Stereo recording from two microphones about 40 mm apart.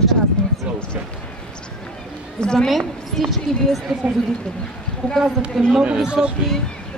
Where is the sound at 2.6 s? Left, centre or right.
Centre.